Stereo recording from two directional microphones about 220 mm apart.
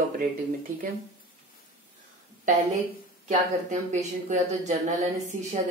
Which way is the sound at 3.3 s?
35° right (ahead or behind).